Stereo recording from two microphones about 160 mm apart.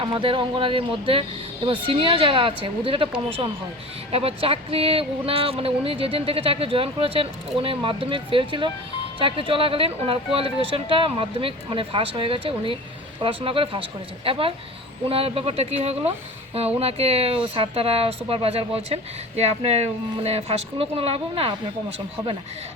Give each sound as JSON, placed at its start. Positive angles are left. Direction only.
{"t": 0.0, "sound": "speech", "side_deg": -30}